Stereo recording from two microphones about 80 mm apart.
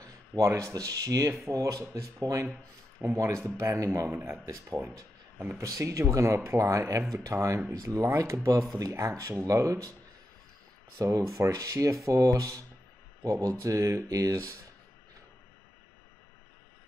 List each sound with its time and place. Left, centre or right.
0.4 s speech: right
2.4 s speech: centre
3.1 s speech: right
5.6 s speech: right
11.1 s speech: right